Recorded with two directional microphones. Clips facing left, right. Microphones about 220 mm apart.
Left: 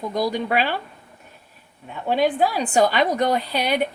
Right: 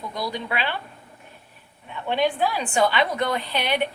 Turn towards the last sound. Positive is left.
turn(degrees=40)  # may be behind; listen again after turning